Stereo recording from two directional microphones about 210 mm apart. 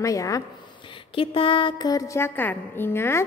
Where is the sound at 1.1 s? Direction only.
25° left (ahead or behind).